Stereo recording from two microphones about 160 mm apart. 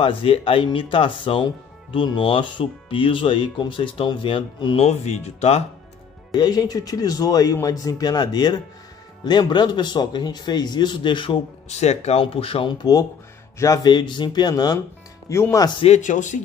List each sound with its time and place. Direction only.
0.0 s speech: 35° left (ahead or behind)
6.3 s speech: 25° left (ahead or behind)
15.8 s speech: 45° left (ahead or behind)